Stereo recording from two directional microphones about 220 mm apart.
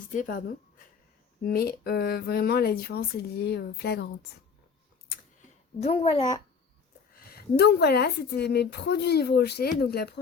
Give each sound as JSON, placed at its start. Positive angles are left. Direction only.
{"t": 0.1, "sound": "a woman's voice", "side_deg": 35}
{"t": 5.8, "sound": "a child's voice", "side_deg": 30}
{"t": 7.1, "sound": "a woman's voice", "side_deg": 45}